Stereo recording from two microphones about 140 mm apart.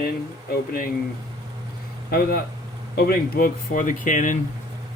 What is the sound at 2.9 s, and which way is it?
Speech, 90° left.